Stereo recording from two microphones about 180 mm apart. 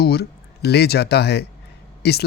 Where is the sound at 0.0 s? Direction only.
60° left (ahead or behind).